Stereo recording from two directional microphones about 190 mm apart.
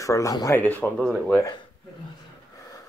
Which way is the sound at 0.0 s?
15° left (ahead or behind).